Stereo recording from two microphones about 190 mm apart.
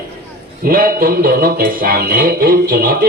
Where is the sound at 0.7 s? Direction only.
50° right (ahead or behind).